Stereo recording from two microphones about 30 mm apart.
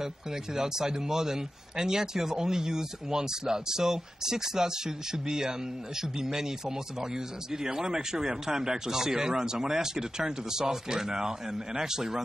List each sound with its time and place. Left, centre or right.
0.0 s a man's voice: centre